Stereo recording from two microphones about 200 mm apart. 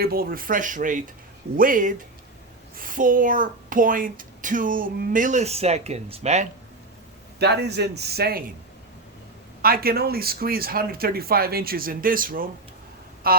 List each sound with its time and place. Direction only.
0.0 s a woman's voice: 50° right (ahead or behind)
7.3 s a man's voice: 55° right (ahead or behind)
9.6 s speech: 50° right (ahead or behind)